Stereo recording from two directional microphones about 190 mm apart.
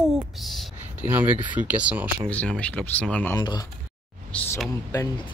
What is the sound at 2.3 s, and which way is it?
Speech, 5° left (ahead or behind).